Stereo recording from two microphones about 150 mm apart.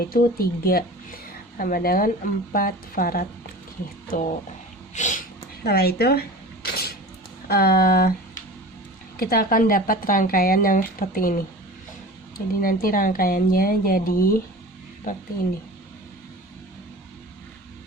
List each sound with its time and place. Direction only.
0.1 s speech: 80° left
1.5 s speech: 70° left (ahead or behind)
4.1 s speech: 60° left (ahead or behind)
5.6 s a sound: 90° left
7.4 s speech: 90° left
9.1 s speech: 80° left
12.6 s speech: 70° left (ahead or behind)